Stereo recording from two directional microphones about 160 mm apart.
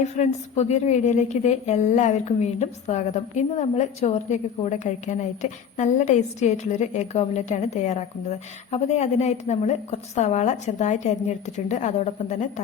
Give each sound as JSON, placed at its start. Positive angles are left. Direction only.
{"t": 0.2, "sound": "a woman's voice", "side_deg": 45}